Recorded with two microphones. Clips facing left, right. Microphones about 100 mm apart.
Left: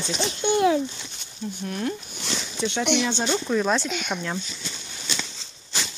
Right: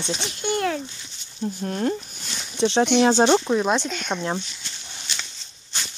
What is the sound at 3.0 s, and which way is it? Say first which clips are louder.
Speech: right 9 dB; 50° right (ahead or behind).